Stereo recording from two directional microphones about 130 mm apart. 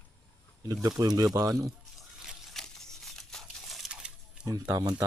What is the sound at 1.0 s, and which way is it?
Speech, 30° right (ahead or behind).